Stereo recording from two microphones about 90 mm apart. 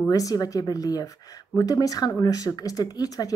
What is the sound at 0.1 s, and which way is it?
A woman's voice, 40° left (ahead or behind).